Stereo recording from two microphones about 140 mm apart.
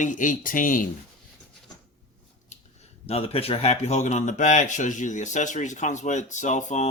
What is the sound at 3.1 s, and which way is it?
Speech, 45° left (ahead or behind).